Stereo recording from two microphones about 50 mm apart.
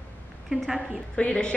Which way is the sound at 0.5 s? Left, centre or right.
Centre.